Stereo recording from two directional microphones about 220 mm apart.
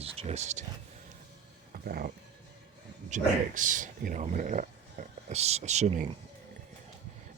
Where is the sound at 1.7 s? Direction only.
45° right (ahead or behind).